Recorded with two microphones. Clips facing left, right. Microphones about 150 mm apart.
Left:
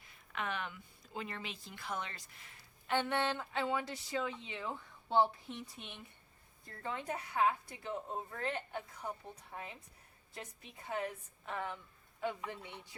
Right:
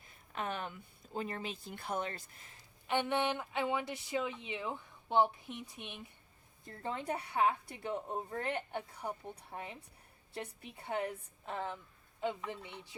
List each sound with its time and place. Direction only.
0.3 s speech: 40° right (ahead or behind)
2.8 s speech: 15° right (ahead or behind)
6.7 s a woman's voice: 30° right (ahead or behind)
9.3 s a woman's voice: 30° right (ahead or behind)